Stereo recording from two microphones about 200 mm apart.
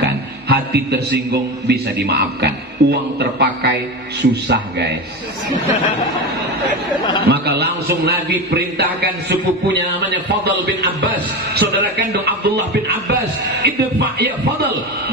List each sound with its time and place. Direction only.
0.0 s a man's voice: 55° right (ahead or behind)
7.2 s a man's voice: 55° right (ahead or behind)